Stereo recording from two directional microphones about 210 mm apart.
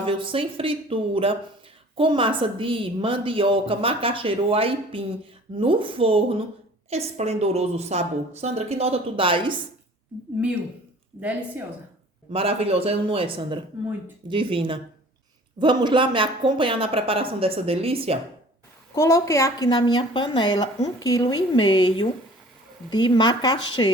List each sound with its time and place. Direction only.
0.0 s a woman's voice: 25° right (ahead or behind)
11.2 s speech: 5° right (ahead or behind)
12.3 s a woman's voice: 25° right (ahead or behind)
18.9 s a woman's voice: 15° left (ahead or behind)